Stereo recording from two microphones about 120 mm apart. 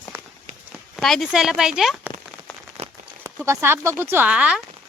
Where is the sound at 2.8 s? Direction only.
55° right (ahead or behind).